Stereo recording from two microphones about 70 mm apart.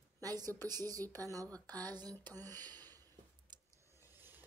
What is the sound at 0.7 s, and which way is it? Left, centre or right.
Speech, right.